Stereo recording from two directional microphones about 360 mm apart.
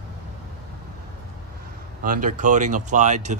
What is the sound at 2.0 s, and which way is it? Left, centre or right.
Speech, right.